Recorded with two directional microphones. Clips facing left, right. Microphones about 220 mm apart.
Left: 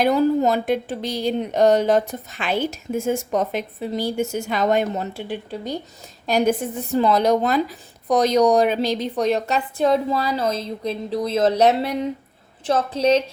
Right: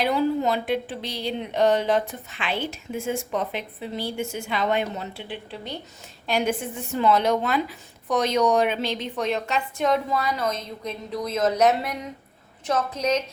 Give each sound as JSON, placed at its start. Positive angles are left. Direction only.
{"t": 0.0, "sound": "a woman's voice", "side_deg": 45}